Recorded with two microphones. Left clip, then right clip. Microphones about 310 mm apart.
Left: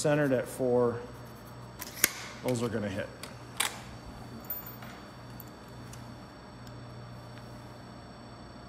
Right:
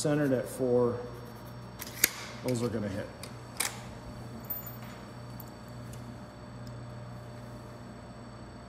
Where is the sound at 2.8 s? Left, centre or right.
Centre.